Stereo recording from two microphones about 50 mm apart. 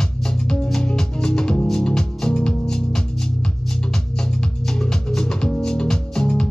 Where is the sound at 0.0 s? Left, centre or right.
Centre.